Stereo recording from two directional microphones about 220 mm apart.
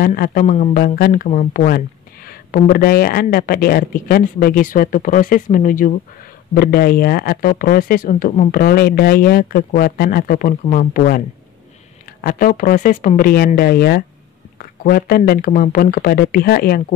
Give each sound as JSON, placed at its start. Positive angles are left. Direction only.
{"t": 0.0, "sound": "speech", "side_deg": 40}